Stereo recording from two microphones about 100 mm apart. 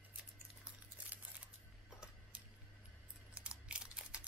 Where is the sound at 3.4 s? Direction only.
10° right (ahead or behind).